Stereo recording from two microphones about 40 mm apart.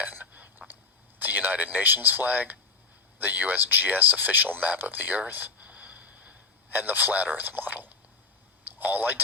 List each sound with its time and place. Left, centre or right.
0.0 s whispering: right
1.2 s speech: right
6.7 s a man's voice: right